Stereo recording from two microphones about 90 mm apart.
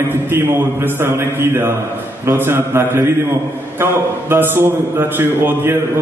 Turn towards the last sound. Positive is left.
turn(degrees=-25)  # may be behind; listen again after turning